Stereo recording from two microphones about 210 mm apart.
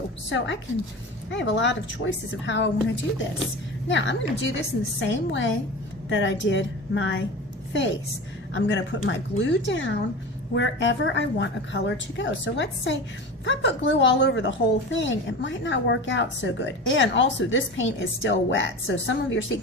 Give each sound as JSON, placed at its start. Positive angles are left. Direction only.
{"t": 0.3, "sound": "a woman's voice", "side_deg": 60}